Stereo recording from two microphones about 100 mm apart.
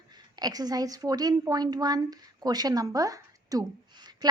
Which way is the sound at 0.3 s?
40° right (ahead or behind).